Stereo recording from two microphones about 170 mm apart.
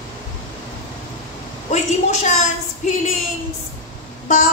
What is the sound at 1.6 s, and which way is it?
A woman's voice, 45° left (ahead or behind).